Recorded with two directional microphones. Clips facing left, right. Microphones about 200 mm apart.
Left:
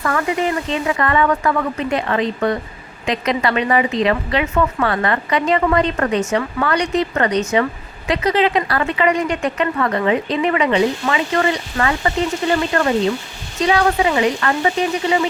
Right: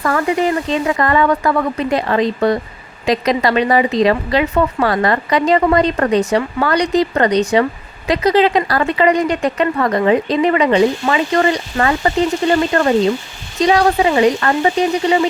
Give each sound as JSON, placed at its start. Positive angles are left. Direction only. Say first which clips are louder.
{"t": 0.7, "sound": "a woman's voice", "louder": "right 3 dB", "side_deg": -35}